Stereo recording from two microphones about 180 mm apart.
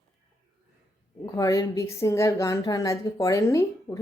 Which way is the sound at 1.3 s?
20° left (ahead or behind).